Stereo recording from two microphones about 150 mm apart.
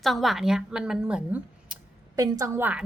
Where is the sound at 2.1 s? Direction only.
20° right (ahead or behind).